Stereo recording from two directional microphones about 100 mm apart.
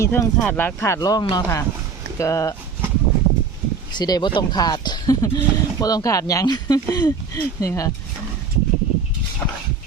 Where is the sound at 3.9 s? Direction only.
45° left (ahead or behind).